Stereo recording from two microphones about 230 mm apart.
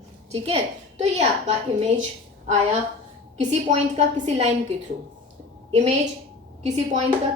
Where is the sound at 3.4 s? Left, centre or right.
Right.